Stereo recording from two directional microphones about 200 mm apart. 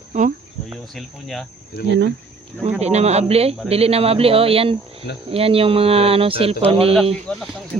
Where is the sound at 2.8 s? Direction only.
30° right (ahead or behind).